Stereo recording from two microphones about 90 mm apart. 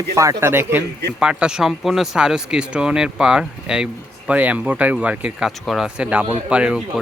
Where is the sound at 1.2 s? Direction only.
10° right (ahead or behind).